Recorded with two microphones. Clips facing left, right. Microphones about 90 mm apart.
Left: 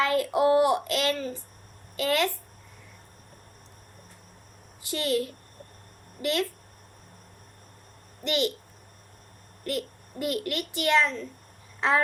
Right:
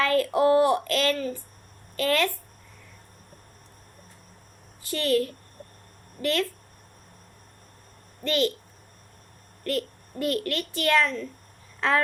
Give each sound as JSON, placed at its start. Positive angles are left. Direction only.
{"t": 0.0, "sound": "a child's voice", "side_deg": 15}
{"t": 4.8, "sound": "a woman's voice", "side_deg": 20}
{"t": 8.2, "sound": "a child's voice", "side_deg": 20}
{"t": 9.6, "sound": "a child's voice", "side_deg": 15}